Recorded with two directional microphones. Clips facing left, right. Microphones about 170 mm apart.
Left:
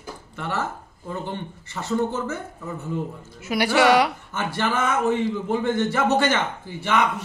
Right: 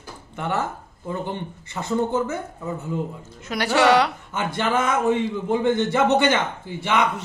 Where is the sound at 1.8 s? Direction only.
15° right (ahead or behind).